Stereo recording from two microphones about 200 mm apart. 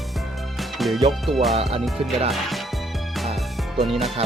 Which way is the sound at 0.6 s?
Centre (ahead or behind).